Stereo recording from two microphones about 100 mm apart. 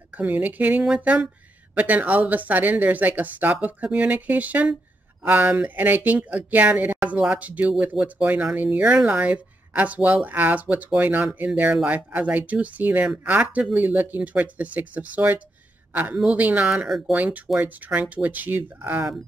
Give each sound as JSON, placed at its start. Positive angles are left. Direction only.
{"t": 0.1, "sound": "a woman's voice", "side_deg": -15}